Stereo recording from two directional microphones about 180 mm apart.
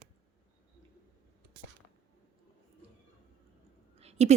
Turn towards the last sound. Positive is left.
turn(degrees=-35)  # may be behind; listen again after turning